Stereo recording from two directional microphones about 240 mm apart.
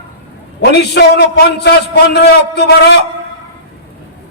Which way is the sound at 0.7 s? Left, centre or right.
Left.